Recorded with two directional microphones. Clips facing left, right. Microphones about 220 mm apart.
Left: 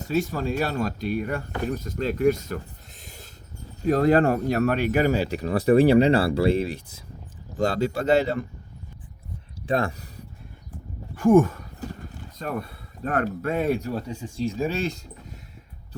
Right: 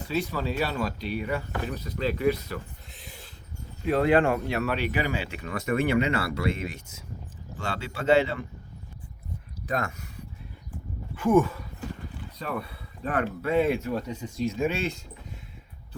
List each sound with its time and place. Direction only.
0.0 s speech: 45° left (ahead or behind)
3.0 s a sound: 45° left (ahead or behind)
3.8 s speech: 40° left (ahead or behind)
9.6 s speech: 30° left (ahead or behind)
11.1 s speech: 45° left (ahead or behind)